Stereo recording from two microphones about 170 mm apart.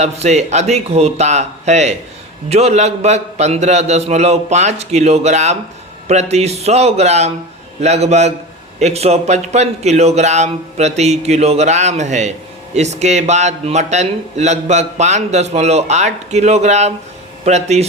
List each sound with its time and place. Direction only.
0.0 s a man's voice: 40° right (ahead or behind)